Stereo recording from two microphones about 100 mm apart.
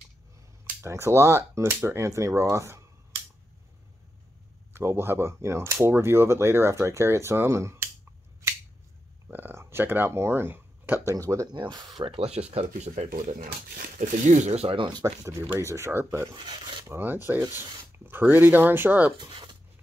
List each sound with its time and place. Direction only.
0.8 s speech: 30° right (ahead or behind)
4.7 s speech: 25° right (ahead or behind)
9.3 s speech: 20° right (ahead or behind)
11.1 s speech: 35° right (ahead or behind)
11.5 s speech: 45° right (ahead or behind); by 13.1 s 90° right
14.5 s speech: 75° right (ahead or behind); by 15.0 s 50° right (ahead or behind)
15.0 s speech: 25° right (ahead or behind)
16.3 s speech: 50° right (ahead or behind)
16.8 s speech: 25° right (ahead or behind)
19.1 s speech: 50° right (ahead or behind)